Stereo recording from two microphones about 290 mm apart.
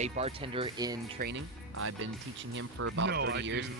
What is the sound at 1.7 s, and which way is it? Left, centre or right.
Speech, right.